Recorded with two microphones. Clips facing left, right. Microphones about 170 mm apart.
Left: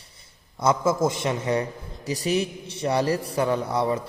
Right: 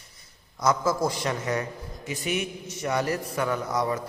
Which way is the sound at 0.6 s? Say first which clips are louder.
Left 3 dB; 25° left (ahead or behind).